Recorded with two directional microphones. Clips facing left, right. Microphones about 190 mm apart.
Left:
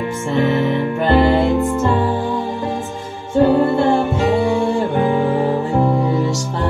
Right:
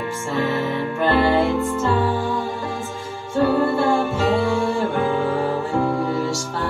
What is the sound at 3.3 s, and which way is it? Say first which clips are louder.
Music: left 5 dB; 20° left (ahead or behind).